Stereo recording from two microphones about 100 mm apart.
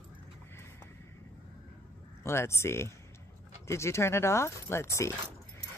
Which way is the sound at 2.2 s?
25° left (ahead or behind).